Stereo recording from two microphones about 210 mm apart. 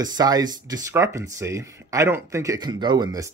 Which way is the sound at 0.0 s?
20° right (ahead or behind).